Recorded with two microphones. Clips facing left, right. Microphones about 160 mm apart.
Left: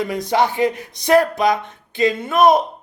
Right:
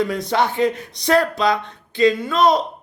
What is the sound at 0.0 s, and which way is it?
Speech, 20° left (ahead or behind).